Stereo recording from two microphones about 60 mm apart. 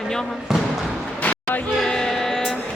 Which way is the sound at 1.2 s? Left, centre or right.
Left.